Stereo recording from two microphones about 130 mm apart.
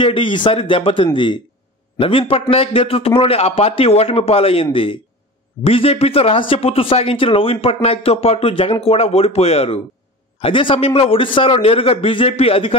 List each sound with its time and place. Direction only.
0.0 s a man's voice: 40° left (ahead or behind)
5.7 s a man's voice: 45° left (ahead or behind)
10.4 s a man's voice: 40° left (ahead or behind)